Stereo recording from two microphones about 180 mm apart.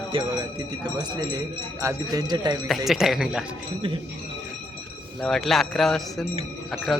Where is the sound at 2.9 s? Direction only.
Centre (ahead or behind).